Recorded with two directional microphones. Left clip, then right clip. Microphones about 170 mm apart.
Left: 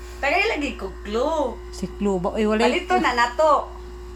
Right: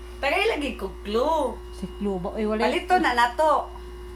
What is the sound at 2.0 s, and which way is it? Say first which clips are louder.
Speech: left 5 dB; 25° left (ahead or behind).